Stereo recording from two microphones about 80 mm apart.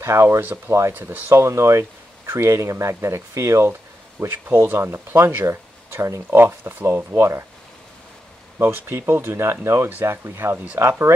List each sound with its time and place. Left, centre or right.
0.0 s speech: right
0.4 s speech: right
0.7 s speech: right
6.3 s speech: right
7.2 s speech: right
8.5 s speech: right